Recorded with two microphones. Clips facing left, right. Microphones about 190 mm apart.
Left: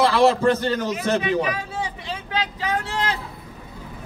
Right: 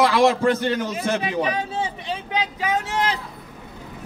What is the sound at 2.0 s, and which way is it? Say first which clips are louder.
Speech: right 1 dB; 15° right (ahead or behind).